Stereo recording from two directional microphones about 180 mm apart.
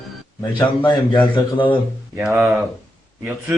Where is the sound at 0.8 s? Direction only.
25° left (ahead or behind).